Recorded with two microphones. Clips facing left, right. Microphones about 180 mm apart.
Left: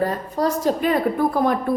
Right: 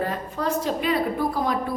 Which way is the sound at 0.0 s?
40° left (ahead or behind).